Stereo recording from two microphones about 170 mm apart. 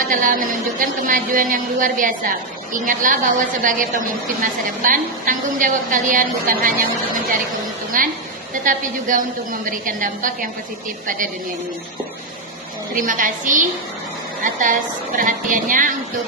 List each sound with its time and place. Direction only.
0.1 s a woman's voice: 50° right (ahead or behind)
12.9 s a woman's voice: 50° right (ahead or behind)